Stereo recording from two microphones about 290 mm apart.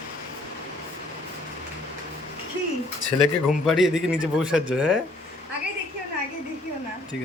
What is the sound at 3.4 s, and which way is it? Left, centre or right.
Speech, centre.